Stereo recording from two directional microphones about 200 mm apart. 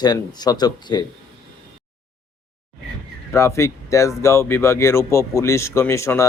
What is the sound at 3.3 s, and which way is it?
Speech, 15° left (ahead or behind).